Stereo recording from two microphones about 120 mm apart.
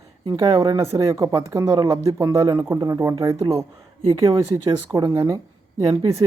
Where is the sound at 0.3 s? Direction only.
35° right (ahead or behind).